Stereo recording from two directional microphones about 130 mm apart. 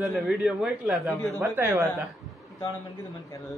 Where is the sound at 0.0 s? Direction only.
Centre (ahead or behind).